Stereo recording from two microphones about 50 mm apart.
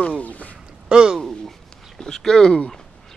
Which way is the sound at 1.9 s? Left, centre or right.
Centre.